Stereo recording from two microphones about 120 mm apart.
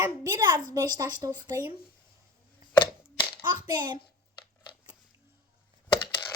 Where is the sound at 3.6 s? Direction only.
35° right (ahead or behind).